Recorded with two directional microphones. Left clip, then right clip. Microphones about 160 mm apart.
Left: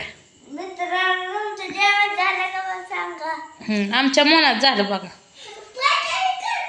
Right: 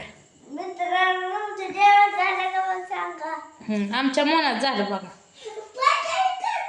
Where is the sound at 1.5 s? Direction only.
15° right (ahead or behind).